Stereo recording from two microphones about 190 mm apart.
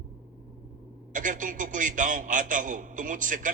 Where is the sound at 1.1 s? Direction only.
45° right (ahead or behind).